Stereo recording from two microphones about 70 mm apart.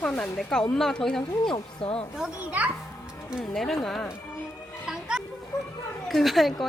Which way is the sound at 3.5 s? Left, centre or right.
Centre.